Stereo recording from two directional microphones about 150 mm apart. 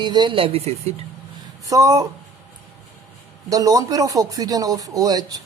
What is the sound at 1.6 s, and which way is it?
Speech, 25° right (ahead or behind).